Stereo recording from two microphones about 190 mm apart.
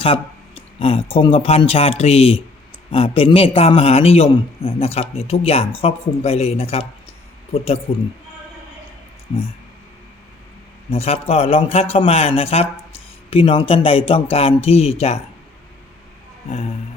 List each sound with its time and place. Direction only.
0.0 s a man's voice: 30° left (ahead or behind)
10.9 s a man's voice: 35° left (ahead or behind)